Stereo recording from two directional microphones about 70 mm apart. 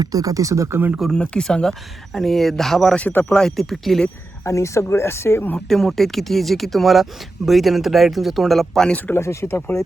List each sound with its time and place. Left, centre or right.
0.0 s speech: right
1.1 s speech: centre
2.9 s speech: left
3.2 s speech: centre
4.4 s speech: left
5.5 s speech: centre
9.1 s speech: left